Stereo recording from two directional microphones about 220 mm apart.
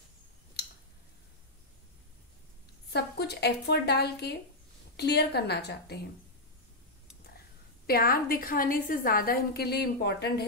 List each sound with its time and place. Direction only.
2.9 s a woman's voice: 50° left (ahead or behind)
7.8 s a woman's voice: 40° left (ahead or behind)